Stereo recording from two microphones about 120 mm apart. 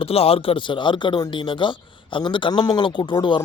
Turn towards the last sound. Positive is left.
turn(degrees=40)  # may be behind; listen again after turning